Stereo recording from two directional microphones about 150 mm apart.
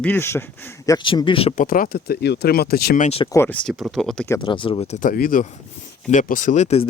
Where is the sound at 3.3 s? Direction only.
15° left (ahead or behind).